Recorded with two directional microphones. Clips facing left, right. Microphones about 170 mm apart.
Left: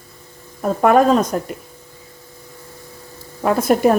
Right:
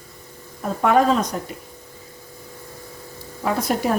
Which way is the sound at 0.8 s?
50° left (ahead or behind).